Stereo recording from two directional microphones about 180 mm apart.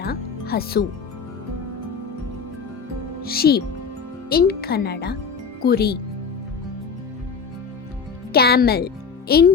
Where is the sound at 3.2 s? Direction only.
60° left (ahead or behind).